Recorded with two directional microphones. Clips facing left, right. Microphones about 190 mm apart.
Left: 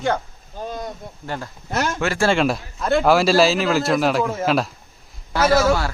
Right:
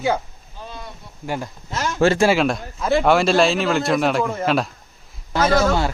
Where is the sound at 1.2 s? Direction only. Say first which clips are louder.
Right 3 dB; 10° right (ahead or behind).